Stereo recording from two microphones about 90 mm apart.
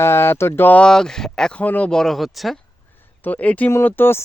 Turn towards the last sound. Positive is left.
turn(degrees=25)  # may be behind; listen again after turning